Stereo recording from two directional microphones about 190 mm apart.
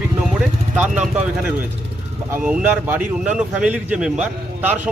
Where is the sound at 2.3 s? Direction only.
5° right (ahead or behind).